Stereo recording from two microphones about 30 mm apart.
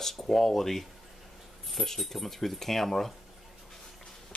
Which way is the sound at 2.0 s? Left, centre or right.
Centre.